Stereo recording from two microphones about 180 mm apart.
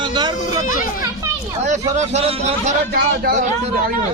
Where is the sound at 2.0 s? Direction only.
40° right (ahead or behind).